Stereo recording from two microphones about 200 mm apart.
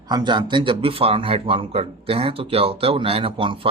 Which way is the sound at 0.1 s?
20° right (ahead or behind).